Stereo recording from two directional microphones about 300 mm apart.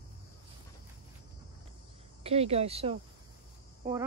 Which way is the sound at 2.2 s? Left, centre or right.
Centre.